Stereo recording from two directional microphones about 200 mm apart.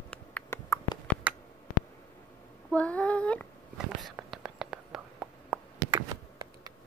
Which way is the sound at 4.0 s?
Centre (ahead or behind).